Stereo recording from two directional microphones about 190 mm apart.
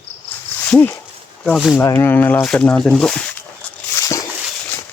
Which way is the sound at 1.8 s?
10° left (ahead or behind).